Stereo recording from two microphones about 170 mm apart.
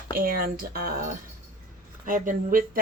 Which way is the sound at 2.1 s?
50° right (ahead or behind).